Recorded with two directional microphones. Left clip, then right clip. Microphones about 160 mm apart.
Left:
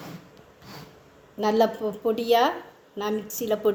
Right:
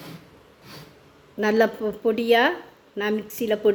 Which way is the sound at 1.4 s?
60° right (ahead or behind).